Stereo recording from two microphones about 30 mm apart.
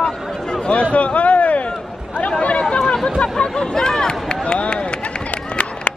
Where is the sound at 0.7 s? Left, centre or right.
Left.